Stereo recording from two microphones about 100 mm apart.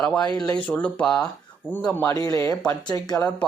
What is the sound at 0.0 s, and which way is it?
Speech, 10° left (ahead or behind).